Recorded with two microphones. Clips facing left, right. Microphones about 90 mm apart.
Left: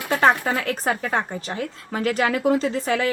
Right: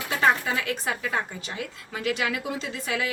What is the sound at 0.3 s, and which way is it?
Speech, 45° left (ahead or behind).